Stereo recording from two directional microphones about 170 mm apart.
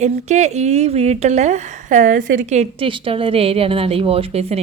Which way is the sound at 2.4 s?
35° right (ahead or behind).